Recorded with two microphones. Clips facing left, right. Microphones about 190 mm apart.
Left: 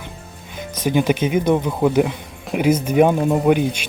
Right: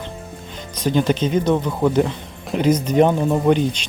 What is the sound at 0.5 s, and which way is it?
Speech, 10° left (ahead or behind).